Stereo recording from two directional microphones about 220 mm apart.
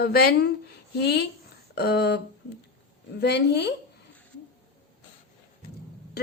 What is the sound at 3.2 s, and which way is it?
Speech, 50° left (ahead or behind).